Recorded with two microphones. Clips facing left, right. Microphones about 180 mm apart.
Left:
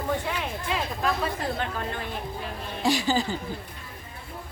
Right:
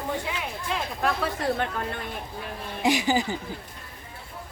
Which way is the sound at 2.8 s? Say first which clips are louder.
Right 1 dB; 20° right (ahead or behind).